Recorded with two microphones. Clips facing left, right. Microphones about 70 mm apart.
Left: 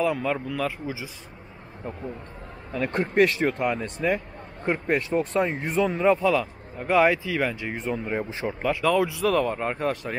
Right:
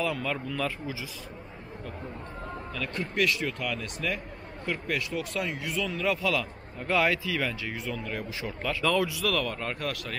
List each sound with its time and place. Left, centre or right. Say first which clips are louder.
0.0 s speech: left 5 dB; centre
0.8 s a man's voice: left 3 dB; left
2.7 s a man's voice: left 10 dB; left